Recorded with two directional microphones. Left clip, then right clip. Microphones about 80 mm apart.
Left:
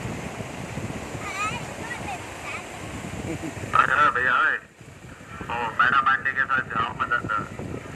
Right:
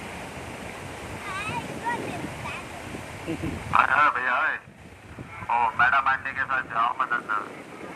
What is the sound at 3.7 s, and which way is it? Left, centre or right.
Speech, right.